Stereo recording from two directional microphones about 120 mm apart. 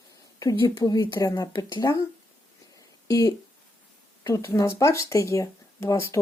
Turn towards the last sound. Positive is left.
turn(degrees=25)  # may be behind; listen again after turning